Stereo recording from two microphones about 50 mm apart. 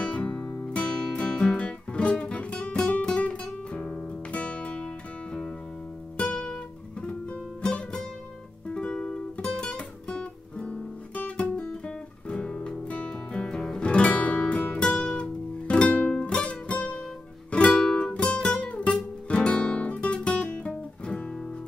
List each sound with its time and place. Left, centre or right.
0.0 s music: left
6.1 s music: centre
10.7 s guitar: left
12.3 s music: centre
17.6 s music: centre
17.9 s guitar: left